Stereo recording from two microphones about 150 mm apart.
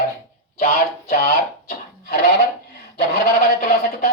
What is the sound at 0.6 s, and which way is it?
Speech, 90° left.